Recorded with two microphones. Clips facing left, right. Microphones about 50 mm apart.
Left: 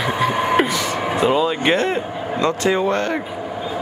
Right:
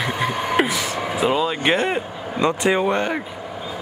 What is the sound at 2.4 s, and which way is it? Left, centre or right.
Speech, centre.